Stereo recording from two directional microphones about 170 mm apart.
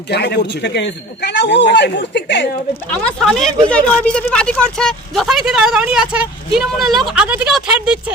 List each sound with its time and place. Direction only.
0.1 s a man's voice: 75° left (ahead or behind)
2.9 s speech: 5° left (ahead or behind)